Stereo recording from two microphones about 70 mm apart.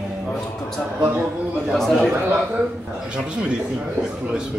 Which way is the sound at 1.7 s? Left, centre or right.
Centre.